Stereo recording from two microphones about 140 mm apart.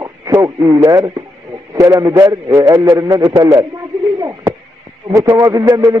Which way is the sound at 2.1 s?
25° right (ahead or behind).